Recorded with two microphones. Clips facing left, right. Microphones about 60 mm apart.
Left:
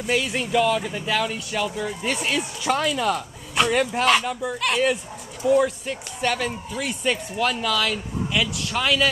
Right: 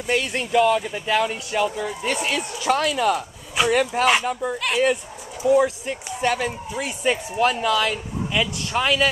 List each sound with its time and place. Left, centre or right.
0.0 s speech: centre